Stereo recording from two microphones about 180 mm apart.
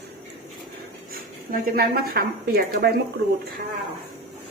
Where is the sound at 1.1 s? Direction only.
55° right (ahead or behind).